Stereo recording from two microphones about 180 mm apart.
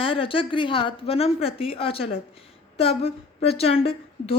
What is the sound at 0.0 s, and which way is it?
A woman's voice, 30° left (ahead or behind).